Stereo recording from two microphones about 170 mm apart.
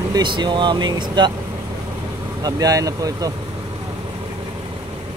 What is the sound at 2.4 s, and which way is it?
Speech, 20° right (ahead or behind).